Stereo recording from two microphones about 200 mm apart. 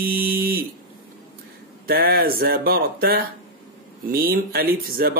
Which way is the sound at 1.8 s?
50° right (ahead or behind).